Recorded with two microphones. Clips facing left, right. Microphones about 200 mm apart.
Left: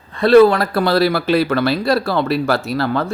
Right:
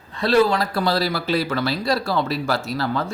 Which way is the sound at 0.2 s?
55° left (ahead or behind).